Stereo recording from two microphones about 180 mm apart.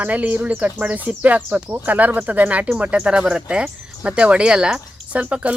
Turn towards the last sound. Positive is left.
turn(degrees=-5)  # may be behind; listen again after turning